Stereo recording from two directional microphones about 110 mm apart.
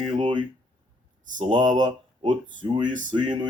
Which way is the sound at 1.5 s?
45° right (ahead or behind).